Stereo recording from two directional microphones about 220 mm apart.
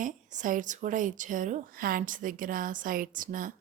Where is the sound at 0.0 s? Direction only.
35° right (ahead or behind).